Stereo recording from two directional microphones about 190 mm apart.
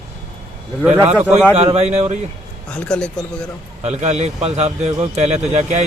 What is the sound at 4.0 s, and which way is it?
A man's voice, 35° right (ahead or behind).